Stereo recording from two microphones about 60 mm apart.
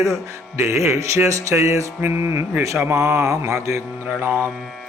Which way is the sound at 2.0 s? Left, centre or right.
Right.